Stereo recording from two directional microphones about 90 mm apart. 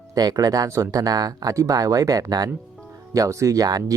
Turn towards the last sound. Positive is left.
turn(degrees=-45)  # may be behind; listen again after turning